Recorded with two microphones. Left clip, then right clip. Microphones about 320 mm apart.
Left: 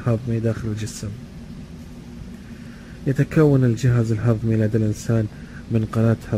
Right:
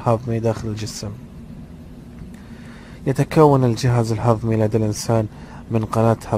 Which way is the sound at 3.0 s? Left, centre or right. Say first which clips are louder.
Right 4 dB; centre.